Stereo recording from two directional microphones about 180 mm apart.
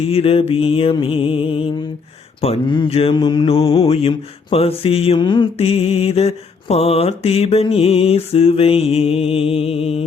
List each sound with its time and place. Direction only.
0.0 s mantra: 35° left (ahead or behind)